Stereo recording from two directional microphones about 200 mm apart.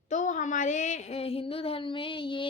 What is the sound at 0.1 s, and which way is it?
A woman's voice, 40° left (ahead or behind).